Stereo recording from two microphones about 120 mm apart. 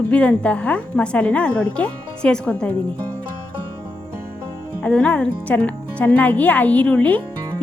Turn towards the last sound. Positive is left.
turn(degrees=10)  # may be behind; listen again after turning